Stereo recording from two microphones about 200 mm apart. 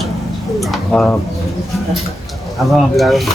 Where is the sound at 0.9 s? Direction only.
5° left (ahead or behind).